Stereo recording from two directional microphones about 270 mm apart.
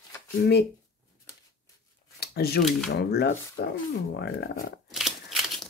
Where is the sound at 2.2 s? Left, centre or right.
Left.